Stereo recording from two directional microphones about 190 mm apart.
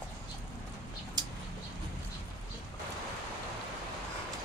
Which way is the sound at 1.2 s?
20° right (ahead or behind).